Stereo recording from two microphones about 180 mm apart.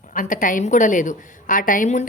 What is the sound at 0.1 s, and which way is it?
A woman's voice, 50° left (ahead or behind).